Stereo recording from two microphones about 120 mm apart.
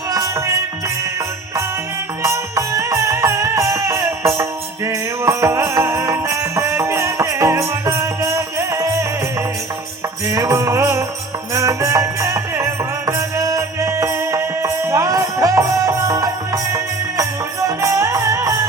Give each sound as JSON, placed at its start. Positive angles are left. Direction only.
{"t": 0.1, "sound": "music", "side_deg": -25}
{"t": 2.2, "sound": "music", "side_deg": -25}
{"t": 10.2, "sound": "music", "side_deg": -25}